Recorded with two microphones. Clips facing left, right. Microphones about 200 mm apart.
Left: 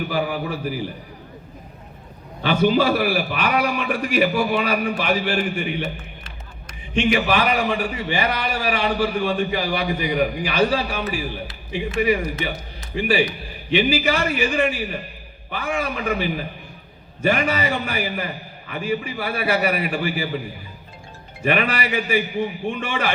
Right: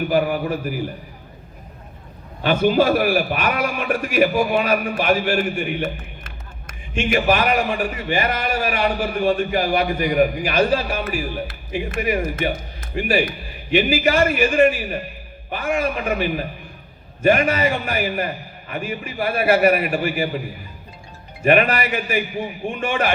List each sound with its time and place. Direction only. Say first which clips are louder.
0.1 s a man's voice: right 4 dB; 50° right (ahead or behind)
2.4 s a man's voice: right 1 dB; 45° right (ahead or behind)
21.4 s a man's voice: right 4 dB; 45° right (ahead or behind)